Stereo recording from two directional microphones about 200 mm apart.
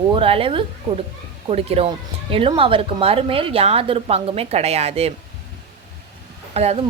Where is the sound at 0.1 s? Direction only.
25° right (ahead or behind).